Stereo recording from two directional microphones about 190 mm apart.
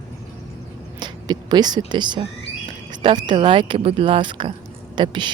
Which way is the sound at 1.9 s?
25° right (ahead or behind).